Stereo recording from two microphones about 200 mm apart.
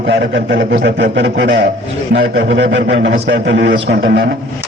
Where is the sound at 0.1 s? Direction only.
60° right (ahead or behind).